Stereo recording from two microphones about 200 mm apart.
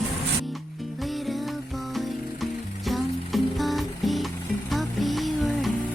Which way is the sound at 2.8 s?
Centre (ahead or behind).